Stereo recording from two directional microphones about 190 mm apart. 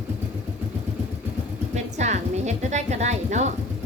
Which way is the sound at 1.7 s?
35° right (ahead or behind).